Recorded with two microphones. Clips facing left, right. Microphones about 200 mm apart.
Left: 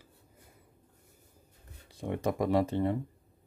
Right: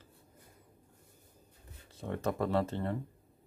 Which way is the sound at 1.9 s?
15° left (ahead or behind).